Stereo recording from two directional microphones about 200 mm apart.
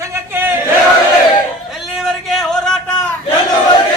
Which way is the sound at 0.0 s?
10° right (ahead or behind).